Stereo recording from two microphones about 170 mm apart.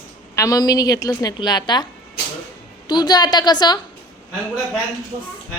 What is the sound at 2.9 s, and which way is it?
Speech, 25° left (ahead or behind).